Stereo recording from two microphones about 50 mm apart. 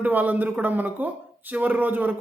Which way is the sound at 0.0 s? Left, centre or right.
Right.